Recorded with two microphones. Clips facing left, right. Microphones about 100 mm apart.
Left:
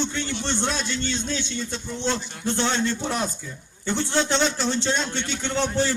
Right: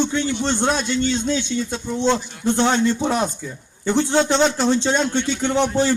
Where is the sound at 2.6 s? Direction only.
40° right (ahead or behind).